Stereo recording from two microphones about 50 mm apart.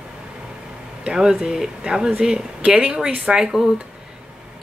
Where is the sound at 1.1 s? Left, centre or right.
Centre.